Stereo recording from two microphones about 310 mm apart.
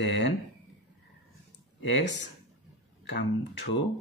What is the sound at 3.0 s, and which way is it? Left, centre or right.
Speech, left.